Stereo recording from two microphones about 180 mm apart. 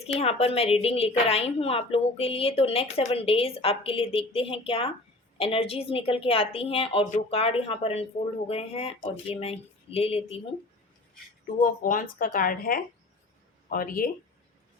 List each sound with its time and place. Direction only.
0.1 s speech: 35° left (ahead or behind)
11.6 s speech: 50° left (ahead or behind)